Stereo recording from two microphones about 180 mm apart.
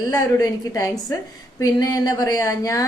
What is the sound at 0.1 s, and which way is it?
A woman's voice, 20° left (ahead or behind).